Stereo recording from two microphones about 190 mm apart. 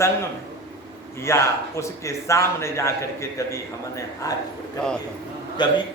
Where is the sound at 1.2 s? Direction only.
15° left (ahead or behind).